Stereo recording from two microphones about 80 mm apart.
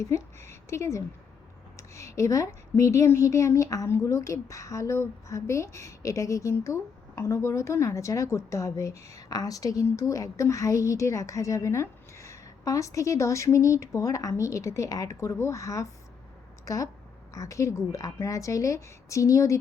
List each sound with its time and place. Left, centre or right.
0.0 s a woman's voice: left